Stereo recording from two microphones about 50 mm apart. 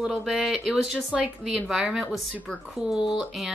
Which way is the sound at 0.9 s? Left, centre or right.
Centre.